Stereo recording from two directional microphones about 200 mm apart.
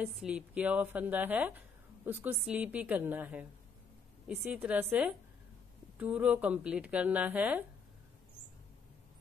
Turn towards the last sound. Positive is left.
turn(degrees=-10)  # may be behind; listen again after turning